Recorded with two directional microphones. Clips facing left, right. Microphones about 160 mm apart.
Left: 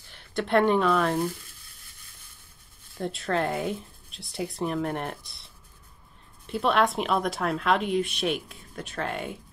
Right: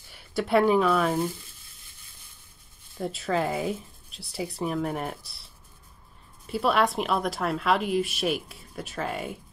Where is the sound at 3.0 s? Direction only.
Centre (ahead or behind).